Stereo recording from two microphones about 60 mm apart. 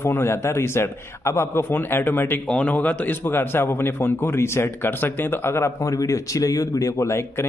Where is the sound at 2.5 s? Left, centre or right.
Left.